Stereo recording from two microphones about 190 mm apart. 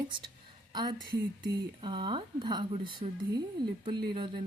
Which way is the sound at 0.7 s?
25° right (ahead or behind).